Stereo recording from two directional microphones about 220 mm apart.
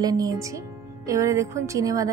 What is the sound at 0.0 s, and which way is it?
Speech, 15° right (ahead or behind).